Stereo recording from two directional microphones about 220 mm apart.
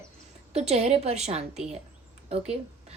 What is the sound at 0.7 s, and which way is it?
A woman's voice, 30° right (ahead or behind).